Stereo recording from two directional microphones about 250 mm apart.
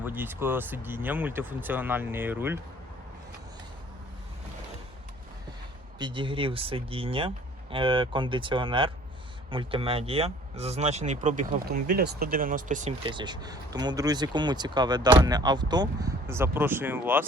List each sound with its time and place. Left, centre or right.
0.0 s speech: centre
6.0 s speech: centre